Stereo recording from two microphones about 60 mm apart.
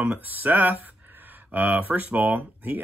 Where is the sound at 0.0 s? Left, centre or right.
Right.